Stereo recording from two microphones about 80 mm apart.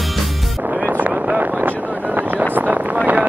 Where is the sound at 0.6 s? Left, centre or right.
Centre.